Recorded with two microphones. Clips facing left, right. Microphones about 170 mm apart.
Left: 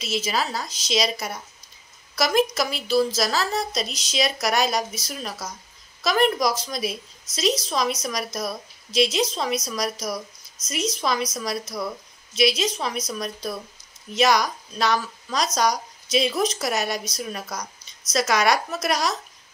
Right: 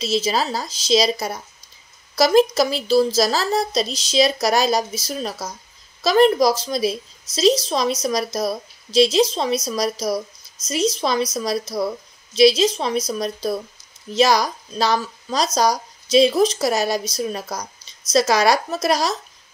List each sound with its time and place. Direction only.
0.0 s speech: 30° right (ahead or behind)